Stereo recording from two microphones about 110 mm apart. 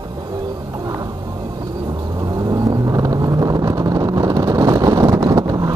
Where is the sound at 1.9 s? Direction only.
35° right (ahead or behind).